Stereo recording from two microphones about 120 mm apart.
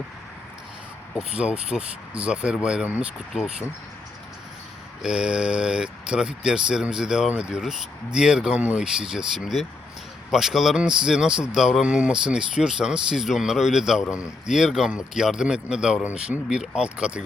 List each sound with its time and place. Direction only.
1.1 s speech: 10° right (ahead or behind)
5.0 s speech: 5° right (ahead or behind)